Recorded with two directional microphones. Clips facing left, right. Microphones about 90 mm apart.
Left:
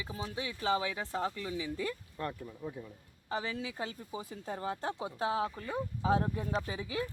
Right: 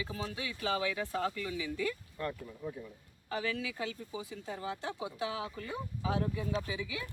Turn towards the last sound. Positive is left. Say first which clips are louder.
# left 2 dB
turn(degrees=40)  # may be behind; listen again after turning